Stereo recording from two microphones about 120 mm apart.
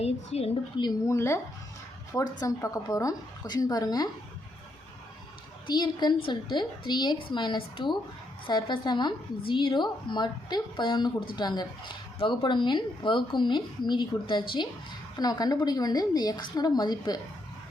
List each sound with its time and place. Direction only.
0.0 s speech: 60° left (ahead or behind)
0.8 s a woman's voice: 35° left (ahead or behind)
1.1 s a woman's voice: 20° left (ahead or behind)
5.6 s a woman's voice: 35° left (ahead or behind)